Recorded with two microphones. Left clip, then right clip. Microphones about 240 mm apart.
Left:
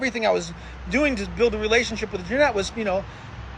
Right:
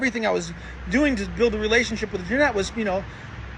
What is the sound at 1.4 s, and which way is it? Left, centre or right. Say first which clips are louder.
Speech: left 1 dB; left.